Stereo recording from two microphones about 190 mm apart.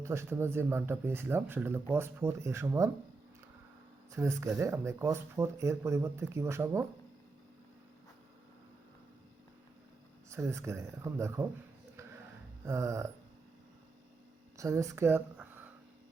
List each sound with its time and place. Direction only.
0.0 s speech: 15° right (ahead or behind)
4.1 s speech: 15° right (ahead or behind)
10.2 s speech: 15° right (ahead or behind)
12.6 s speech: 15° right (ahead or behind)
14.6 s speech: 15° right (ahead or behind)